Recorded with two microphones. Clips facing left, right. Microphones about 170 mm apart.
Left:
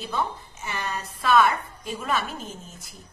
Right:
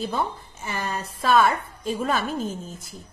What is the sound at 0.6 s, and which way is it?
Speech, 30° right (ahead or behind).